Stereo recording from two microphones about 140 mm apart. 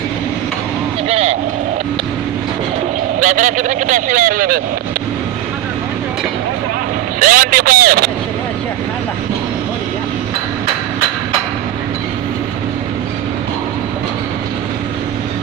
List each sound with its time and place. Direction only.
1.0 s vehicle: 50° right (ahead or behind)
3.2 s speech: 65° right (ahead or behind)
7.2 s speech: 80° right